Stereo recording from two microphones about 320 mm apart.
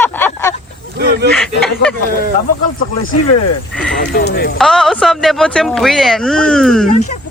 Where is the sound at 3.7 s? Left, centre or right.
Centre.